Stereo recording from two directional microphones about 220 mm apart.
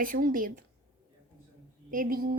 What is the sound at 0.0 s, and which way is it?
Female singing, 40° right (ahead or behind).